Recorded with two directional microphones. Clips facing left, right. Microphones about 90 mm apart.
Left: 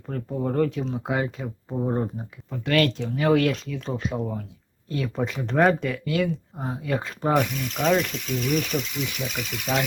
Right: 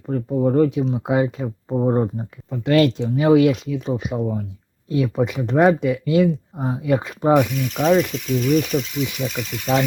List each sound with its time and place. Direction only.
0.1 s speech: 15° right (ahead or behind)
1.7 s speech: 35° right (ahead or behind)
2.5 s speech: 25° right (ahead or behind); by 9.8 s centre (ahead or behind)